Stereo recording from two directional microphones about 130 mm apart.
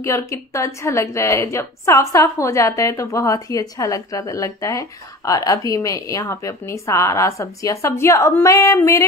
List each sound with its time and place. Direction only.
0.0 s a woman's voice: 20° left (ahead or behind)